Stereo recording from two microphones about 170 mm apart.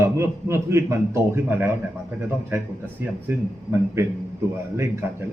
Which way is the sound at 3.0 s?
15° right (ahead or behind).